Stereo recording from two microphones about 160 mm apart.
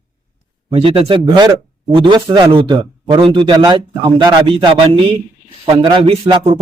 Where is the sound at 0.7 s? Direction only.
35° right (ahead or behind).